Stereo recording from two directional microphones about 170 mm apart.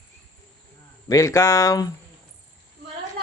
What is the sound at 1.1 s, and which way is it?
Speech, 20° left (ahead or behind).